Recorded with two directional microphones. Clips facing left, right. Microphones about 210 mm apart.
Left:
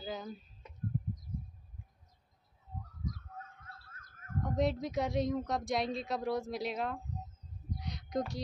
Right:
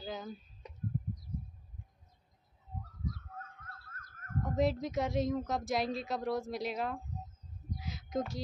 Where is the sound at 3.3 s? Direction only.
50° right (ahead or behind).